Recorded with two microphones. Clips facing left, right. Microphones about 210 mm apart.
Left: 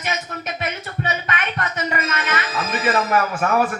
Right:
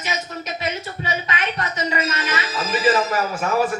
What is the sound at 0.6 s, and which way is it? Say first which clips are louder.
Music: even; 55° left (ahead or behind).